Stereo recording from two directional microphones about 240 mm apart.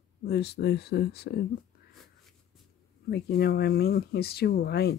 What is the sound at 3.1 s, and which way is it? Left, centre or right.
Speech, left.